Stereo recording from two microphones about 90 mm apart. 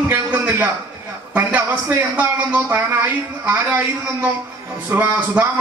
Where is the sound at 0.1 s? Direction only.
20° right (ahead or behind).